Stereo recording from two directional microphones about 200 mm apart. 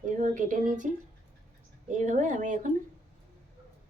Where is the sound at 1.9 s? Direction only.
40° right (ahead or behind).